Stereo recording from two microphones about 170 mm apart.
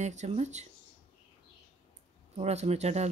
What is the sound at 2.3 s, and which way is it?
Speech, 40° right (ahead or behind).